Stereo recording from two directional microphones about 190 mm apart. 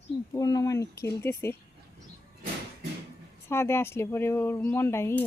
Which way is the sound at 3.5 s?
15° left (ahead or behind).